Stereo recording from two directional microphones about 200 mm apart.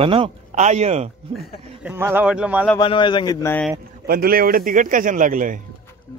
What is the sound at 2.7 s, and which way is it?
Speech, 25° left (ahead or behind).